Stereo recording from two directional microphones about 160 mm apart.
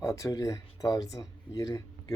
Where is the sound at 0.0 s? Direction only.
20° left (ahead or behind).